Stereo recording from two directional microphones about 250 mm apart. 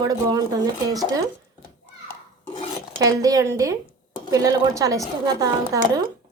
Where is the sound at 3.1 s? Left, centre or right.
Centre.